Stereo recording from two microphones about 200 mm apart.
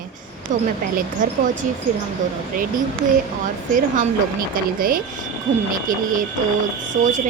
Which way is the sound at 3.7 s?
45° right (ahead or behind).